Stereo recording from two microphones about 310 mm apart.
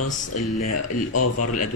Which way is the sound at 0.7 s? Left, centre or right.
Left.